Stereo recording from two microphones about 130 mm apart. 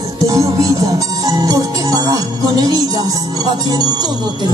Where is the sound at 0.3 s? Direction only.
25° right (ahead or behind).